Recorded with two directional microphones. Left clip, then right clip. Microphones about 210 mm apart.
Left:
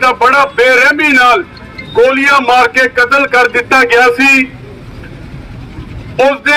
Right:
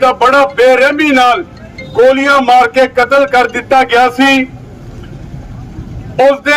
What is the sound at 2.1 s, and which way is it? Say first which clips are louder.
A man's voice: even; 55° right (ahead or behind).